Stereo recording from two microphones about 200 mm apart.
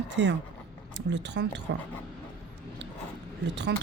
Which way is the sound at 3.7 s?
55° right (ahead or behind).